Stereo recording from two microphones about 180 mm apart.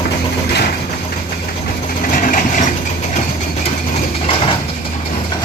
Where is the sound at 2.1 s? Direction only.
50° left (ahead or behind).